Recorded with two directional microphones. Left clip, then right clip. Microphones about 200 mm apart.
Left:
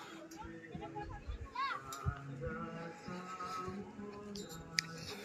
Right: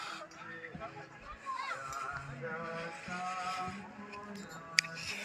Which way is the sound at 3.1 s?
20° left (ahead or behind).